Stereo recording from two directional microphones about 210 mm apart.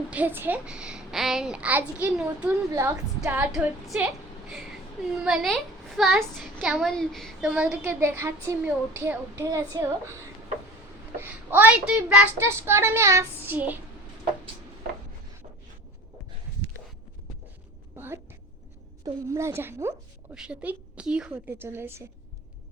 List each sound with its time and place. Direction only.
0.1 s a child's voice: 10° right (ahead or behind)
5.2 s a child's voice: centre (ahead or behind)
11.2 s a woman's voice: 10° right (ahead or behind)
17.9 s a sound: 10° right (ahead or behind)
19.0 s a woman's voice: 15° right (ahead or behind)